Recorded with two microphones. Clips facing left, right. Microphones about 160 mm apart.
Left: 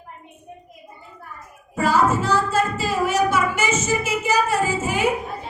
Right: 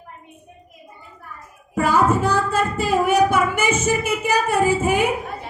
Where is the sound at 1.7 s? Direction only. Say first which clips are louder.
Right 1 dB; 55° right (ahead or behind).